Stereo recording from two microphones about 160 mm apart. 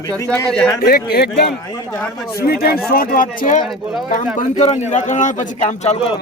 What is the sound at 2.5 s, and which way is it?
Speech, 70° left (ahead or behind).